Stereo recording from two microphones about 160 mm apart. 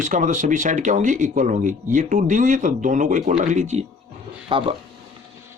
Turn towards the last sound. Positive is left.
turn(degrees=-35)  # may be behind; listen again after turning